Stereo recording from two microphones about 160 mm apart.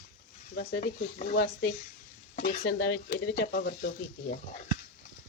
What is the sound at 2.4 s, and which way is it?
Stir, 65° left (ahead or behind).